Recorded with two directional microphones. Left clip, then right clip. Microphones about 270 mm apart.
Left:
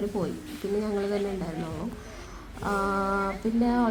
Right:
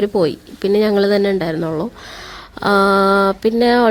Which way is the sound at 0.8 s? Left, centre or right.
Right.